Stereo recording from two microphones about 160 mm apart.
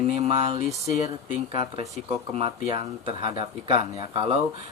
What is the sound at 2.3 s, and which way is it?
Speech, 35° right (ahead or behind).